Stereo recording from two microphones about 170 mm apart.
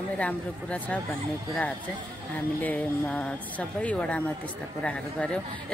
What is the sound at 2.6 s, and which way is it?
A woman's voice, 10° left (ahead or behind).